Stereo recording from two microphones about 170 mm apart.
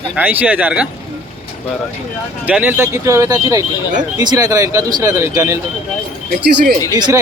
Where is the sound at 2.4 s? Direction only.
10° right (ahead or behind).